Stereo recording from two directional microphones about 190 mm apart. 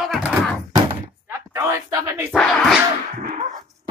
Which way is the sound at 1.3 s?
15° right (ahead or behind).